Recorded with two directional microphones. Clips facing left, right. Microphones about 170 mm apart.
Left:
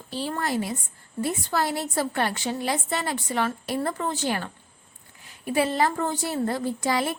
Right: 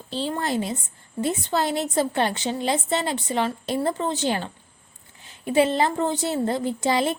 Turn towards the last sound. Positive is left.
turn(degrees=-25)  # may be behind; listen again after turning